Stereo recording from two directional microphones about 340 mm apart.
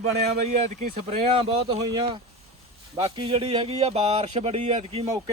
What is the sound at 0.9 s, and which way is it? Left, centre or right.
Speech, right.